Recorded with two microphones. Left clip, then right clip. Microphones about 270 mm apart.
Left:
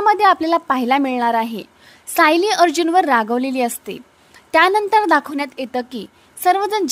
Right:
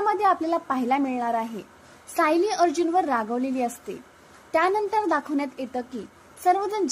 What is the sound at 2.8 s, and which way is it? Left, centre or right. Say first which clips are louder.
Speech: left 7 dB; left.